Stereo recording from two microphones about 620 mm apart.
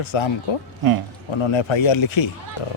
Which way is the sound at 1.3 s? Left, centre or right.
Left.